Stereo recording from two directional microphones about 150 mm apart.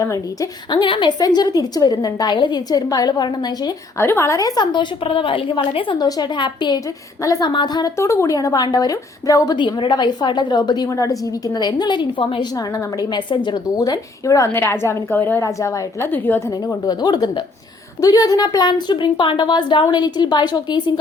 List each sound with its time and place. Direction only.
0.7 s a woman's voice: 30° left (ahead or behind)
4.0 s a woman's voice: 15° left (ahead or behind)
16.8 s a woman's voice: 25° left (ahead or behind)